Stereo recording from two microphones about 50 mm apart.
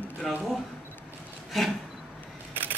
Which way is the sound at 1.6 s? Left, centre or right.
Centre.